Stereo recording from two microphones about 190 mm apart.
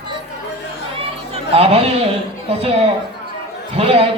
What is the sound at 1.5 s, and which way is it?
Speech, 30° right (ahead or behind).